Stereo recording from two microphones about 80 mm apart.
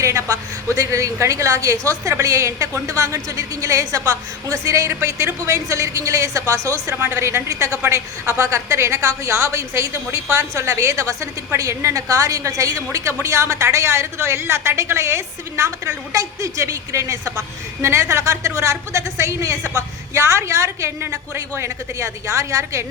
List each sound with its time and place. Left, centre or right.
0.0 s a woman's voice: right